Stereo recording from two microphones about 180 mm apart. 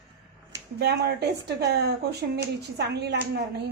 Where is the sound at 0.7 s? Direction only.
65° right (ahead or behind).